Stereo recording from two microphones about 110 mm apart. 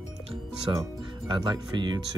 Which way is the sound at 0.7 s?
35° right (ahead or behind).